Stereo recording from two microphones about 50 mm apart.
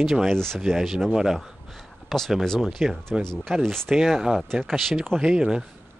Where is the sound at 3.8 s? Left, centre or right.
Centre.